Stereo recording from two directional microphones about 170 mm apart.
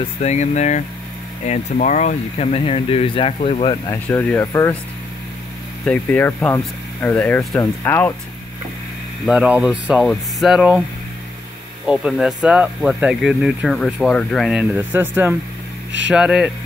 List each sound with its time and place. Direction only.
0.2 s speech: 40° left (ahead or behind)
3.9 s speech: 10° left (ahead or behind)
5.9 s speech: 10° left (ahead or behind)
9.2 s speech: 5° right (ahead or behind)
11.8 s speech: 5° right (ahead or behind)
14.6 s speech: 10° right (ahead or behind)